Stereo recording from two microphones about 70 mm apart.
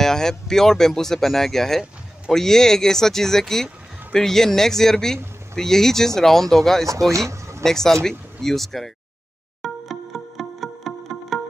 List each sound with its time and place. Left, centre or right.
0.0 s speech: centre
6.9 s speech: right
7.6 s speech: centre
9.6 s music: centre